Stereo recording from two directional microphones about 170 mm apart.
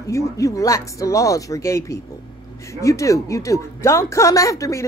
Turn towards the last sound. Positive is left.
turn(degrees=20)  # may be behind; listen again after turning